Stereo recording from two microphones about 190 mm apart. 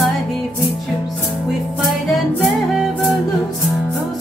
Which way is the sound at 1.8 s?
Centre (ahead or behind).